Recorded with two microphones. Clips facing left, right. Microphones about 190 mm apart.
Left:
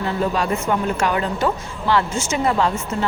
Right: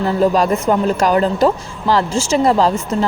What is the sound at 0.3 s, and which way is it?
A woman's voice, 40° right (ahead or behind).